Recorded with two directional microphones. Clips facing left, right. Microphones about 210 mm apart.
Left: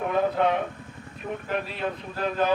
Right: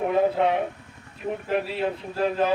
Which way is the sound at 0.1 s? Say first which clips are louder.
Right 1 dB; 30° right (ahead or behind).